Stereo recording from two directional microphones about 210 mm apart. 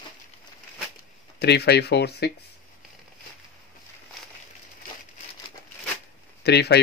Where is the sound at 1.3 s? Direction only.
50° left (ahead or behind).